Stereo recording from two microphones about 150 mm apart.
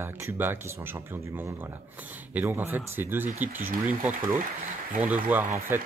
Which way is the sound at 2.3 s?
15° right (ahead or behind).